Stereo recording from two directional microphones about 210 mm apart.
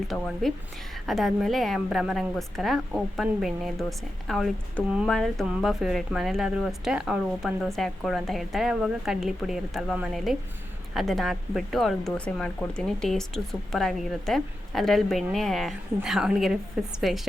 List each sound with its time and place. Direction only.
0.1 s a woman's voice: centre (ahead or behind)